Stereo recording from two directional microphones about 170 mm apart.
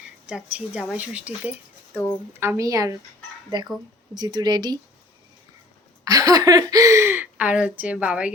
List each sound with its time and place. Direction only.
0.7 s a woman's voice: 5° right (ahead or behind)
4.1 s speech: 25° right (ahead or behind)
6.1 s a woman's voice: 20° right (ahead or behind)